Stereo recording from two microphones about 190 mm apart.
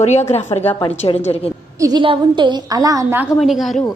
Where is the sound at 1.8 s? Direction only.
25° right (ahead or behind).